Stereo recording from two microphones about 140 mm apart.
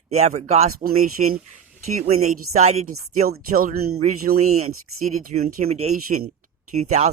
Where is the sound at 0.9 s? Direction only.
90° right.